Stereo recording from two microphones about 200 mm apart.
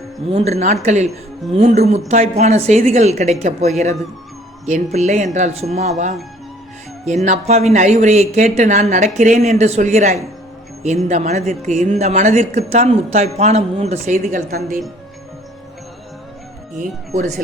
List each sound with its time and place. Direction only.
0.3 s a woman's voice: 30° right (ahead or behind)
7.0 s a woman's voice: 35° right (ahead or behind)
16.7 s a woman's voice: 40° right (ahead or behind)